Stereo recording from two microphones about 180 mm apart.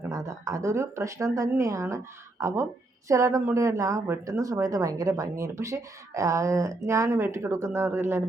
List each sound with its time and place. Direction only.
0.0 s speech: 15° right (ahead or behind)